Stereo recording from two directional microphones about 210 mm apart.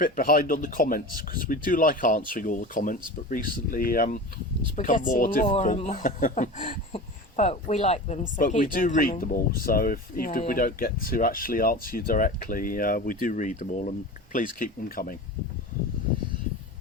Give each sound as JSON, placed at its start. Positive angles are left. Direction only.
{"t": 0.0, "sound": "speech", "side_deg": 45}
{"t": 5.5, "sound": "speech", "side_deg": 30}